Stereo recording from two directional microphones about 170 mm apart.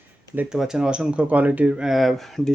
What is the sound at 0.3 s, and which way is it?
Speech, 5° right (ahead or behind).